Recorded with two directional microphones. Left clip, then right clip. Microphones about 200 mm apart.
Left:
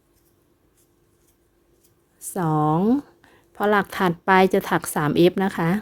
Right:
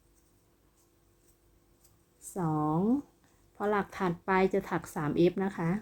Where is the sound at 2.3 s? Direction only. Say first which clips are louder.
Left 10 dB; 50° left (ahead or behind).